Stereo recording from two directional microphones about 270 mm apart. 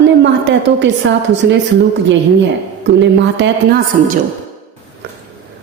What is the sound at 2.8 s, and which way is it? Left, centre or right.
Speech, right.